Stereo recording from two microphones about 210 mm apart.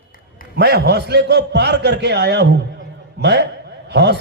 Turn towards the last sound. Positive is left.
turn(degrees=-55)  # may be behind; listen again after turning